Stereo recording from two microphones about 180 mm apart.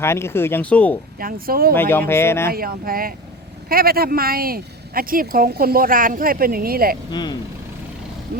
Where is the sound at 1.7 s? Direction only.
10° left (ahead or behind).